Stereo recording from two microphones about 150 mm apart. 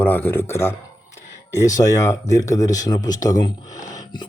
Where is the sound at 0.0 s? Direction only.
10° left (ahead or behind).